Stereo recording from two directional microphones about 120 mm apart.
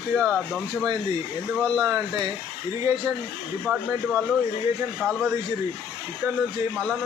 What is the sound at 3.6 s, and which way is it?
Speech, 5° right (ahead or behind).